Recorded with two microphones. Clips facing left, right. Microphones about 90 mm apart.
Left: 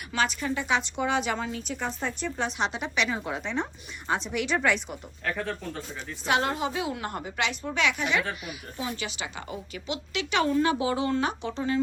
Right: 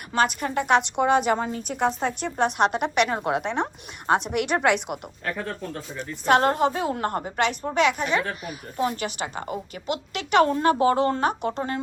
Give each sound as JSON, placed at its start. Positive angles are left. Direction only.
{"t": 0.1, "sound": "a woman's voice", "side_deg": -50}
{"t": 5.2, "sound": "speech", "side_deg": -5}
{"t": 6.0, "sound": "a woman's voice", "side_deg": -50}